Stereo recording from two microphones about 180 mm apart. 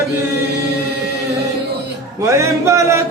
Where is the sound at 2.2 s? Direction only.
15° right (ahead or behind).